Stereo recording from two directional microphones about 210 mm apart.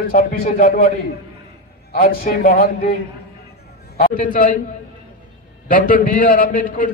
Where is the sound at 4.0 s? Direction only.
40° left (ahead or behind).